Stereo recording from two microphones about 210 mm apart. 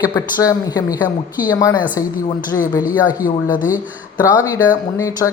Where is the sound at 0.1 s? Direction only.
20° left (ahead or behind).